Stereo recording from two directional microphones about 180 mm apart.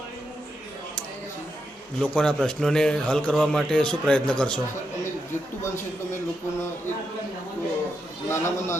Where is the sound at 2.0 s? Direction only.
5° left (ahead or behind).